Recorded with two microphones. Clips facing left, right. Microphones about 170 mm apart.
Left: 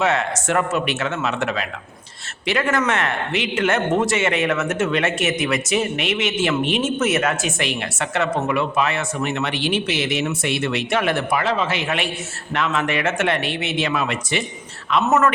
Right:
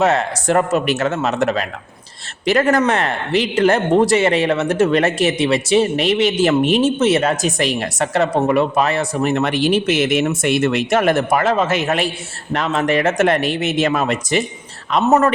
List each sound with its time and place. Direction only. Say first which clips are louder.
0.0 s speech: right 4 dB; 35° right (ahead or behind)